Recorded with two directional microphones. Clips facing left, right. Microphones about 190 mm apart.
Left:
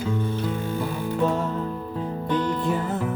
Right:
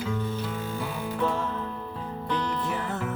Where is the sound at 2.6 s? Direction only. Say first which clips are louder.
Left 5 dB; 20° left (ahead or behind).